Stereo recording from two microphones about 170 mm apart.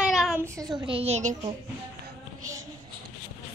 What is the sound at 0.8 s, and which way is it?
Speech, 35° right (ahead or behind).